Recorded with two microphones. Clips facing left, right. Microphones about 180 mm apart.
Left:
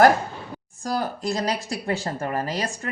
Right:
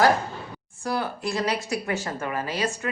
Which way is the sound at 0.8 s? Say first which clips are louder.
Left 1 dB; 40° left (ahead or behind).